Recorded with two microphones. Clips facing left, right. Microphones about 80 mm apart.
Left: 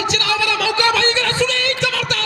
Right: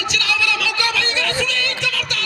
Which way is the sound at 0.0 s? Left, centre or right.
Left.